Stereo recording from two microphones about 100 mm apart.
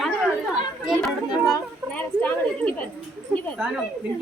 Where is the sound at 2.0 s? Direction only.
15° left (ahead or behind).